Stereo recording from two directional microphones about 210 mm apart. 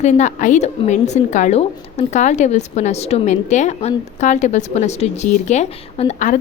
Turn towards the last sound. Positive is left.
turn(degrees=35)  # may be behind; listen again after turning